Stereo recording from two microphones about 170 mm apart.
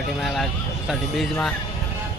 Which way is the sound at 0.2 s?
Centre (ahead or behind).